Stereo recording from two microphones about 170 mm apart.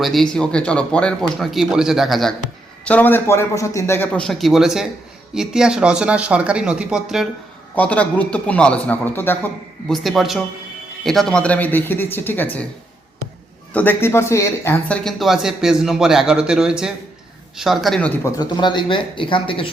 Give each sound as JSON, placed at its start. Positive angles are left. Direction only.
{"t": 0.0, "sound": "a man's voice", "side_deg": 0}
{"t": 7.8, "sound": "a man's voice", "side_deg": 10}
{"t": 9.9, "sound": "a man's voice", "side_deg": 0}
{"t": 13.7, "sound": "a man's voice", "side_deg": 15}
{"t": 15.0, "sound": "speech", "side_deg": 0}